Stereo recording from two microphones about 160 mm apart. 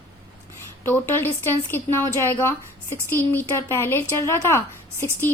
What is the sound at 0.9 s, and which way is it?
A woman's voice, 15° left (ahead or behind).